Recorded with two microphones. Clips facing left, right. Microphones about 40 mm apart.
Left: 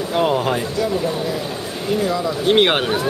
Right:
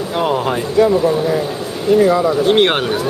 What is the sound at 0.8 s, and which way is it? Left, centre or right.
Speech, right.